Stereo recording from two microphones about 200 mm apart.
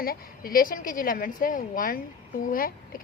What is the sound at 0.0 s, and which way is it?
A woman's voice, 45° left (ahead or behind).